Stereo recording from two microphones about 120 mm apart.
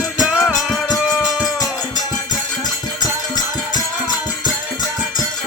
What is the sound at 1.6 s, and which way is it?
Music, 30° left (ahead or behind).